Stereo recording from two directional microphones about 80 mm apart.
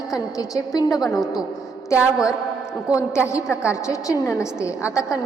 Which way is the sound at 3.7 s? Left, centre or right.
Left.